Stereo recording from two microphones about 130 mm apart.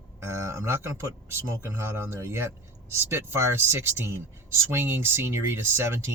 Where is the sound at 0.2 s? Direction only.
20° right (ahead or behind).